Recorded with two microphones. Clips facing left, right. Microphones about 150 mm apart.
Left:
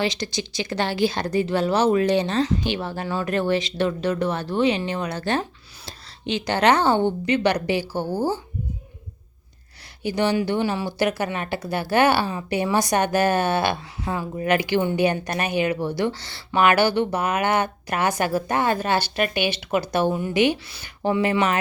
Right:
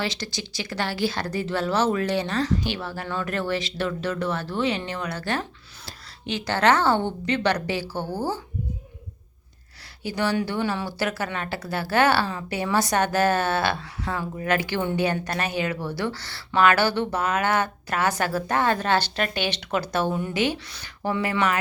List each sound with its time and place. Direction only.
0.0 s speech: 15° left (ahead or behind)
10.0 s speech: 20° left (ahead or behind)